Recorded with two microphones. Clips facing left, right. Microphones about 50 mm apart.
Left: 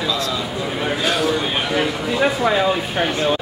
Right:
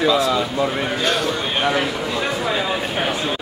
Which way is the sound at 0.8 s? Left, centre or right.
Centre.